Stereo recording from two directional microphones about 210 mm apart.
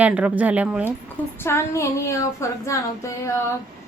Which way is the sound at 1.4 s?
10° left (ahead or behind).